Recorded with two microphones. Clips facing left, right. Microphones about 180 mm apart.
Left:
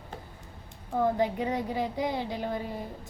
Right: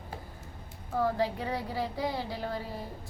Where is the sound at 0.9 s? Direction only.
20° left (ahead or behind).